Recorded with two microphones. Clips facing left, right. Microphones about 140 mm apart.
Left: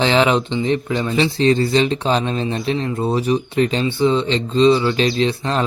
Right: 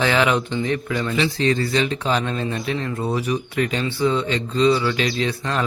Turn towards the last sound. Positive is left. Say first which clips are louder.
# left 4 dB
turn(degrees=30)  # may be behind; listen again after turning